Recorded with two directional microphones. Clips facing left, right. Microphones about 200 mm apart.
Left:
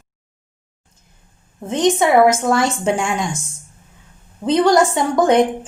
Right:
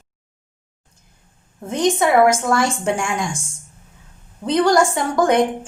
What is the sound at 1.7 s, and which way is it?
A woman's voice, 25° left (ahead or behind).